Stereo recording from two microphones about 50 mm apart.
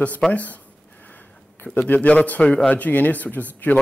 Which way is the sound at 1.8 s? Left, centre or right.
Left.